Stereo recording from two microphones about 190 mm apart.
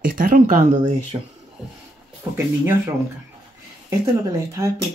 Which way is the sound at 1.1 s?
25° right (ahead or behind).